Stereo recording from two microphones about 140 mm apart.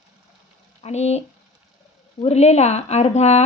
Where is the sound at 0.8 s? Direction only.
50° left (ahead or behind).